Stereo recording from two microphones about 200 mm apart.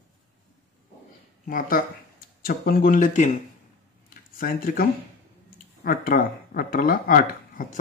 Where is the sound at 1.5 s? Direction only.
45° left (ahead or behind).